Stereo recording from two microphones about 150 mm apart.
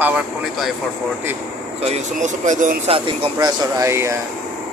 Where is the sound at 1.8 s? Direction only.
45° right (ahead or behind).